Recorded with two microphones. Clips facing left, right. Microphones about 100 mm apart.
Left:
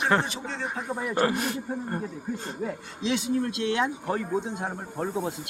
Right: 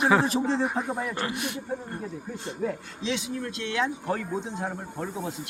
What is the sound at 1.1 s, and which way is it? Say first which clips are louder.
Speech: left 6 dB; 40° left (ahead or behind).